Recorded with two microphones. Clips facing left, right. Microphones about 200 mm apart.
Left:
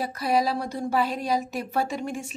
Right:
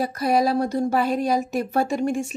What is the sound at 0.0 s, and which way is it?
Speech, 45° right (ahead or behind).